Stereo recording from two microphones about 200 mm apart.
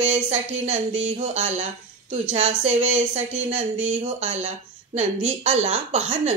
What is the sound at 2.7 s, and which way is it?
Speech, 10° right (ahead or behind).